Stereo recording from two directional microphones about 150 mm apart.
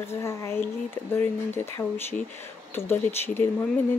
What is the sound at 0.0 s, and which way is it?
Speech, 15° left (ahead or behind).